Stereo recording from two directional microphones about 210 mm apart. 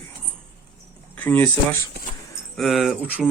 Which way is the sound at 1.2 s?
10° left (ahead or behind).